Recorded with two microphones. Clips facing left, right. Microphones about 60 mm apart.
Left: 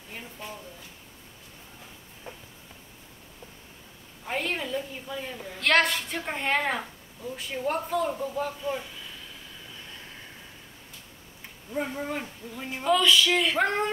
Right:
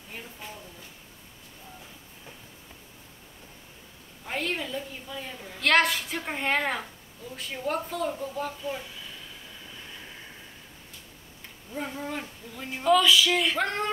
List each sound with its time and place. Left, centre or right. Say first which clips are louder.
4.3 s a woman's voice: left 1 dB; centre
11.7 s speech: left 3 dB; centre
12.9 s speech: right 1 dB; centre
13.6 s a sound: left 3 dB; centre